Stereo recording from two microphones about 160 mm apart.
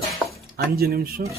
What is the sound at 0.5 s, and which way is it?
Speech, 75° right (ahead or behind).